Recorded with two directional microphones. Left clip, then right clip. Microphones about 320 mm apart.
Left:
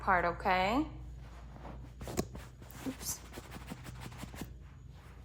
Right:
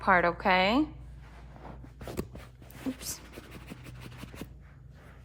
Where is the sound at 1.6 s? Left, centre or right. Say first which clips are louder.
Right 3 dB; centre.